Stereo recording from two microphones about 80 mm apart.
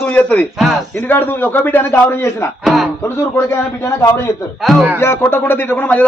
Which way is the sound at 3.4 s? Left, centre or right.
Left.